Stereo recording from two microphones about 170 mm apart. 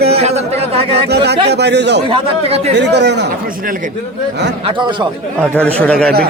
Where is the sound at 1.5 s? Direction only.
80° right.